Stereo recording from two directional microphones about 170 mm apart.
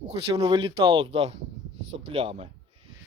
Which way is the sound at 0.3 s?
25° right (ahead or behind).